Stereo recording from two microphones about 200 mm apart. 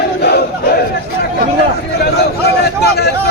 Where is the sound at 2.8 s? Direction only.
55° left (ahead or behind).